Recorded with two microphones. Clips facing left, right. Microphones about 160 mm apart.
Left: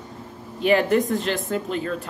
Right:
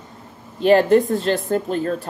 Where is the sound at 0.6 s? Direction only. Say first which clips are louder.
Right 5 dB; 35° right (ahead or behind).